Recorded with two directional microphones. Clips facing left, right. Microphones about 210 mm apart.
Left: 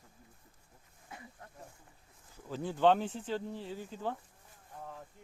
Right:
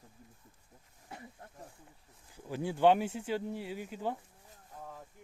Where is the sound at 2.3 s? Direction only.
10° right (ahead or behind).